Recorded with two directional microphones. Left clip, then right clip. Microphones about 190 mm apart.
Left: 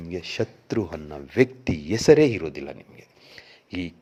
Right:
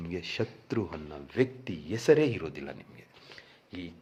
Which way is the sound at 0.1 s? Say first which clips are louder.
Left 6 dB; 15° left (ahead or behind).